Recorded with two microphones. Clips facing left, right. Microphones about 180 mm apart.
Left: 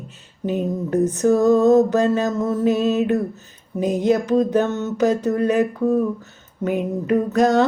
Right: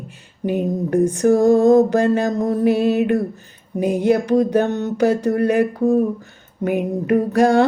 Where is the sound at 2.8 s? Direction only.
65° right (ahead or behind).